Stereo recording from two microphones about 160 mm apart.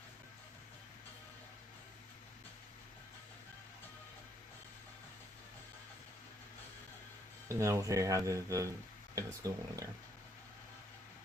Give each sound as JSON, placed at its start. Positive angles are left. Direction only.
{"t": 7.4, "sound": "speech", "side_deg": -20}